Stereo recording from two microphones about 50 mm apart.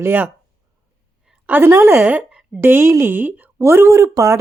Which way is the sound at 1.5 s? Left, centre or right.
Right.